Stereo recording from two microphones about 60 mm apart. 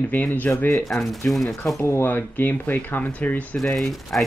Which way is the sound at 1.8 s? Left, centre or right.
Left.